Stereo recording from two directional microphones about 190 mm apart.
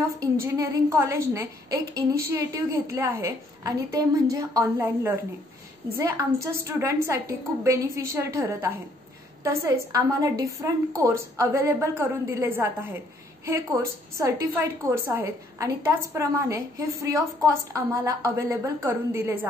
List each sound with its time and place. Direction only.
0.2 s a woman's voice: 15° right (ahead or behind)
14.1 s a woman's voice: 15° right (ahead or behind)